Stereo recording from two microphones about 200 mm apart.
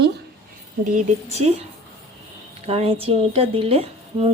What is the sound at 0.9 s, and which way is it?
Speech, 35° right (ahead or behind).